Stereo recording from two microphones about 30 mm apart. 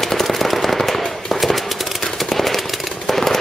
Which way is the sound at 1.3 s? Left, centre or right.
Centre.